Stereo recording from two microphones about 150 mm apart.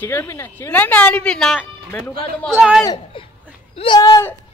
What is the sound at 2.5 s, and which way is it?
Speech, 5° right (ahead or behind).